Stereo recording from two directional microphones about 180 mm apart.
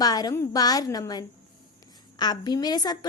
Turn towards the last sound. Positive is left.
turn(degrees=20)  # may be behind; listen again after turning